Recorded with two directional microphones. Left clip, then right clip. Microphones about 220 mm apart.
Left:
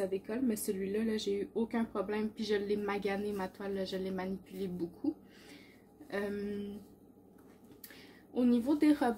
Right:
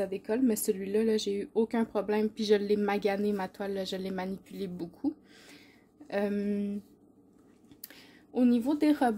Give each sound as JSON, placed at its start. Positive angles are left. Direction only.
{"t": 0.0, "sound": "speech", "side_deg": -50}
{"t": 6.0, "sound": "speech", "side_deg": -45}
{"t": 7.9, "sound": "speech", "side_deg": -45}